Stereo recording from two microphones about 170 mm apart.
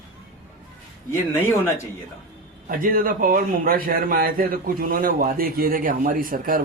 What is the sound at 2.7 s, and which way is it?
A man's voice, 55° right (ahead or behind).